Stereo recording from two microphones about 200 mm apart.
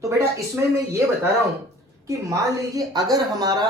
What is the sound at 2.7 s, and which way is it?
Speech, 20° right (ahead or behind).